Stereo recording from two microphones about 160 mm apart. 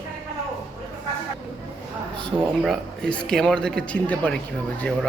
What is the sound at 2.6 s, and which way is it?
Speech, centre (ahead or behind).